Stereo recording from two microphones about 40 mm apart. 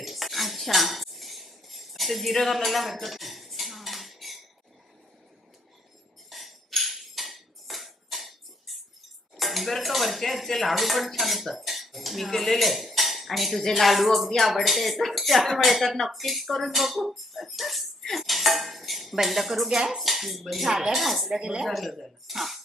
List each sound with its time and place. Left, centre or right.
0.0 s cutlery: centre
6.3 s cutlery: centre
9.3 s speech: centre
18.2 s cutlery: centre
19.1 s speech: centre
21.3 s speech: centre
21.7 s speech: centre